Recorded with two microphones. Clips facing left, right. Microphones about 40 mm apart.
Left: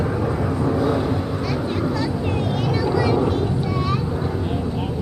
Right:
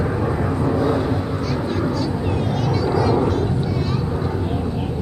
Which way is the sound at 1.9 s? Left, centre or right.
Centre.